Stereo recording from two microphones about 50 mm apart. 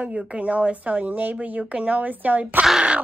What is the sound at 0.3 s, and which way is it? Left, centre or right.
A woman's voice, right.